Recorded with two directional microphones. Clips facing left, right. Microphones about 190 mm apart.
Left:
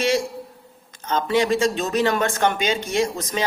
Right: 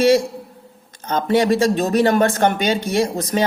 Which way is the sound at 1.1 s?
45° right (ahead or behind).